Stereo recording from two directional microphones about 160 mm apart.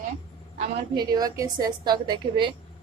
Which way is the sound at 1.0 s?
25° right (ahead or behind).